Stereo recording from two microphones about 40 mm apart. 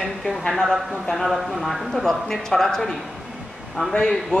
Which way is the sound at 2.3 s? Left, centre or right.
Centre.